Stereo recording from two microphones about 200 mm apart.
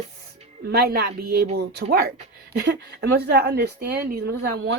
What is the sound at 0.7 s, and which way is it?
Speech, 50° right (ahead or behind).